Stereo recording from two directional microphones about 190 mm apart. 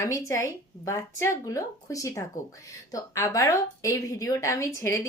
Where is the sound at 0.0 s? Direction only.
15° left (ahead or behind).